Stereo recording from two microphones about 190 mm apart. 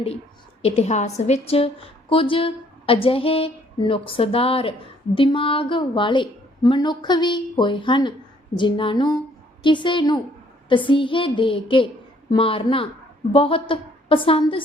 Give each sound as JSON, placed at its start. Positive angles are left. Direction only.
{"t": 0.6, "sound": "a woman's voice", "side_deg": 30}